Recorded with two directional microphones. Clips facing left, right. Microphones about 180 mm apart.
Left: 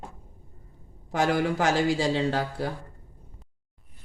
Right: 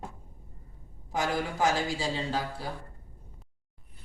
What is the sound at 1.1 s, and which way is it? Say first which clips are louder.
Speech: left 6 dB; 70° left (ahead or behind).